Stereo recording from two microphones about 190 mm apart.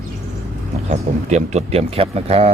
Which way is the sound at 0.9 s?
35° right (ahead or behind).